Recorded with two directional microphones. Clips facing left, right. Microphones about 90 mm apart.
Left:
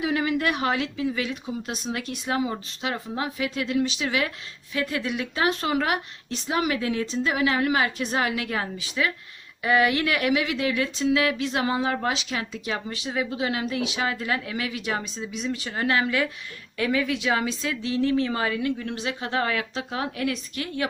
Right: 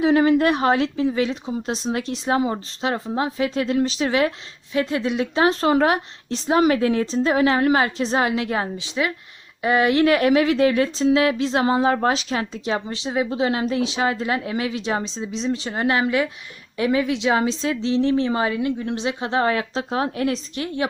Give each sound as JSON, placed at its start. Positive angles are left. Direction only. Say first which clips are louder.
{"t": 0.0, "sound": "a woman's voice", "louder": "right 8 dB", "side_deg": -35}